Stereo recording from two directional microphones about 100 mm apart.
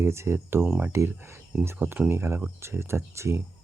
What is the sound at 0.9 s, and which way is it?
Speech, 25° right (ahead or behind).